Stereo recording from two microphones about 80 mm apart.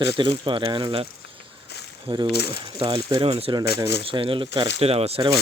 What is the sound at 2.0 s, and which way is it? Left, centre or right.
Speech, right.